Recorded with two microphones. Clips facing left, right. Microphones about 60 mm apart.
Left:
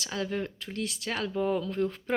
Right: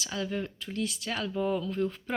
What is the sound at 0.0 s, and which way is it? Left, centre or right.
Speech, left.